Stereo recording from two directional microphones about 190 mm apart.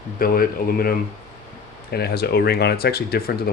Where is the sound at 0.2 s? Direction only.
50° left (ahead or behind).